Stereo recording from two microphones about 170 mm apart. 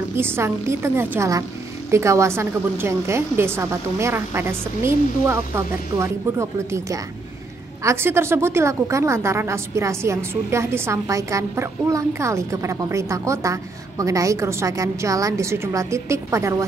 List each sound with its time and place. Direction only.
0.1 s a woman's voice: 15° right (ahead or behind)